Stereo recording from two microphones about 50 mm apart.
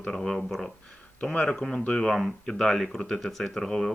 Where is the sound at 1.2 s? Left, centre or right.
Centre.